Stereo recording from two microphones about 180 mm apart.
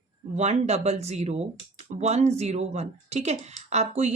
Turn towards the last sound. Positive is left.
turn(degrees=-40)  # may be behind; listen again after turning